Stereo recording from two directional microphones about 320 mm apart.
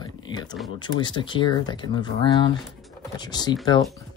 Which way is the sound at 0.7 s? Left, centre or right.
Centre.